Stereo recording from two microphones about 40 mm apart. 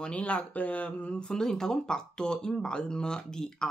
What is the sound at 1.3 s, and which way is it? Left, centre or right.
Speech, centre.